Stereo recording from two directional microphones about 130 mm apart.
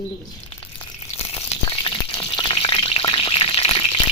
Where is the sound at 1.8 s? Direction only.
40° left (ahead or behind).